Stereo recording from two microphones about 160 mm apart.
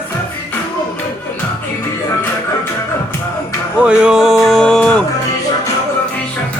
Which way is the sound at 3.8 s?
5° right (ahead or behind).